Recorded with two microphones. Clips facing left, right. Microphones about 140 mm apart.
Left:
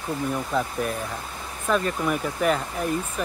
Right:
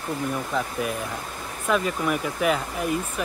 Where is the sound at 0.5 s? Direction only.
Centre (ahead or behind).